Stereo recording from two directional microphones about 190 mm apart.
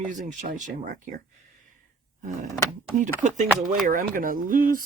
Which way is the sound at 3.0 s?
45° right (ahead or behind).